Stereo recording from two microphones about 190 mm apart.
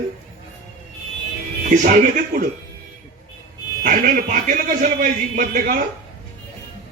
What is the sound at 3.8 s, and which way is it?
A man's voice, 45° right (ahead or behind).